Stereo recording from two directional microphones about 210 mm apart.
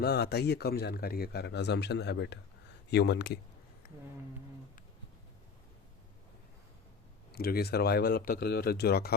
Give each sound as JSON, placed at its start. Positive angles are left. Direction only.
{"t": 0.0, "sound": "speech", "side_deg": 50}
{"t": 7.3, "sound": "speech", "side_deg": 45}